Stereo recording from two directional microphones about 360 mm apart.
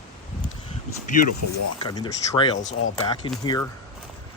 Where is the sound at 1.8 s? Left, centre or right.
Centre.